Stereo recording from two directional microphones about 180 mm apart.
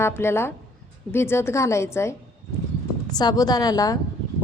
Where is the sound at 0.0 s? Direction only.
15° left (ahead or behind).